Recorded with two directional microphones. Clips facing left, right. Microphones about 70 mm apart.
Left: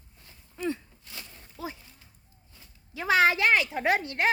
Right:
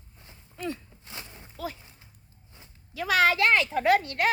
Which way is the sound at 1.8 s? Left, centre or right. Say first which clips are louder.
Right 1 dB; right.